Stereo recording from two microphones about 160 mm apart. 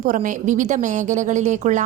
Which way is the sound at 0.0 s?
55° right (ahead or behind).